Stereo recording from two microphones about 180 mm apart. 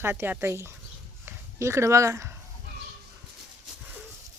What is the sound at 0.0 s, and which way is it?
Speech, 15° right (ahead or behind).